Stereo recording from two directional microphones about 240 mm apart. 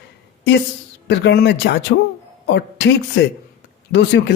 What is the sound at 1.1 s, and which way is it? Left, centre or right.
Speech, left.